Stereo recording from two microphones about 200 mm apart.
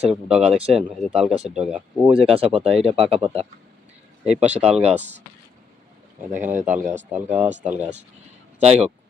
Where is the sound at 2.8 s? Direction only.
30° right (ahead or behind).